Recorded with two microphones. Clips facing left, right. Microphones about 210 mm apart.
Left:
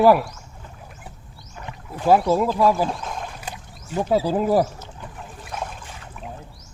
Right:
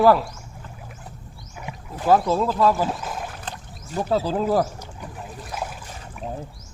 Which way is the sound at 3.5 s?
10° left (ahead or behind).